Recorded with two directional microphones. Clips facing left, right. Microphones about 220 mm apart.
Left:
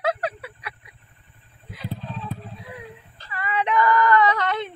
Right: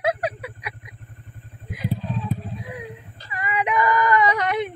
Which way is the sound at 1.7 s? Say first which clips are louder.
Right 6 dB; 15° right (ahead or behind).